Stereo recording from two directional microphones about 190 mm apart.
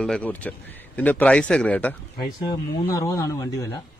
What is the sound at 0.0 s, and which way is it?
A man's voice, 5° left (ahead or behind).